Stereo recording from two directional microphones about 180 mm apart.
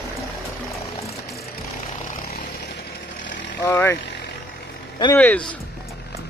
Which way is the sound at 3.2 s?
90° left.